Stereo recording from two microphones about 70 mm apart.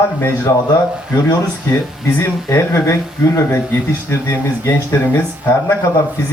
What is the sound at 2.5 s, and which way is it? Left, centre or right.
Speech, left.